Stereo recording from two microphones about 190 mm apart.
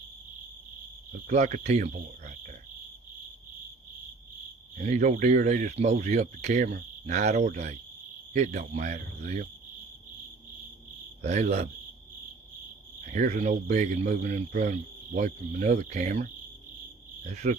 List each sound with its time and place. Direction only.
1.3 s speech: 40° right (ahead or behind)
4.8 s speech: 40° right (ahead or behind)
11.2 s speech: 35° right (ahead or behind)
13.1 s speech: 40° right (ahead or behind)